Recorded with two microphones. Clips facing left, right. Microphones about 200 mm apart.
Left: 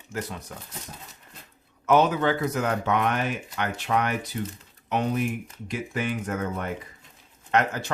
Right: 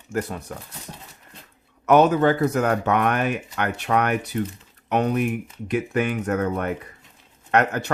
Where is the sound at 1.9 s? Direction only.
55° right (ahead or behind).